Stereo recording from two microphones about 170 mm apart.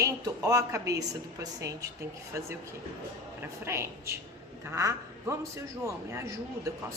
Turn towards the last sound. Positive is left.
turn(degrees=-15)  # may be behind; listen again after turning